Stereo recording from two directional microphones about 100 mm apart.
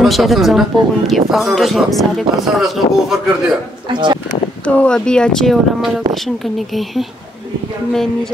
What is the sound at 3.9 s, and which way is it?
Speech, 50° right (ahead or behind).